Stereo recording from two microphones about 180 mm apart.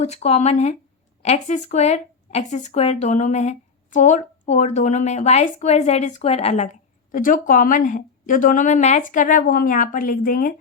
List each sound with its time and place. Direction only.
0.0 s speech: 40° left (ahead or behind)
7.1 s a woman's voice: 50° left (ahead or behind)